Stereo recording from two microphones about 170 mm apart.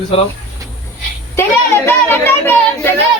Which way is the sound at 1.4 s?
15° left (ahead or behind).